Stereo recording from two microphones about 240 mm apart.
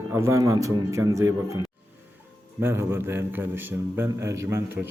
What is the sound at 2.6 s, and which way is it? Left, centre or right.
A man's voice, centre.